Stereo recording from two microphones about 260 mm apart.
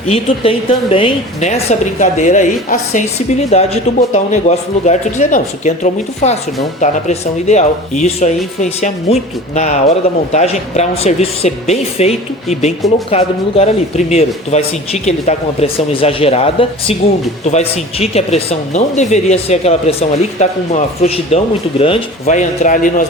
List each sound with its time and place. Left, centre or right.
0.1 s speech: left